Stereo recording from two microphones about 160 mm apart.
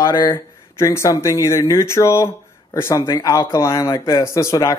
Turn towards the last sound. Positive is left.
turn(degrees=20)  # may be behind; listen again after turning